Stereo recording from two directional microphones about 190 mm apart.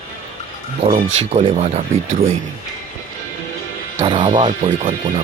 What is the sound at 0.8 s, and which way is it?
Speech, 30° right (ahead or behind).